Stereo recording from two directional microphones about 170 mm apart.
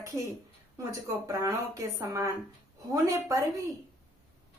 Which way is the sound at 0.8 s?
20° right (ahead or behind).